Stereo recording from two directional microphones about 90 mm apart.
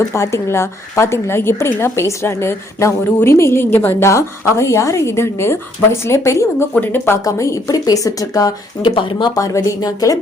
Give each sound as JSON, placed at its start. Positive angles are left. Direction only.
{"t": 0.1, "sound": "a woman's voice", "side_deg": 35}
{"t": 7.3, "sound": "a woman's voice", "side_deg": 35}
{"t": 8.8, "sound": "speech", "side_deg": 65}
{"t": 9.3, "sound": "a woman's voice", "side_deg": 45}